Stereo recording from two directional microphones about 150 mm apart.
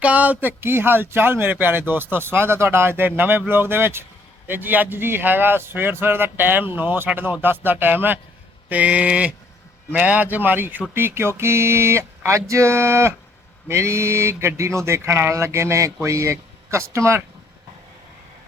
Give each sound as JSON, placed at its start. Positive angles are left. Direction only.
{"t": 0.0, "sound": "speech", "side_deg": -10}